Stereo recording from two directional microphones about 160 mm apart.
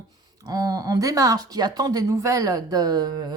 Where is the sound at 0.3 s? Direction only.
25° right (ahead or behind).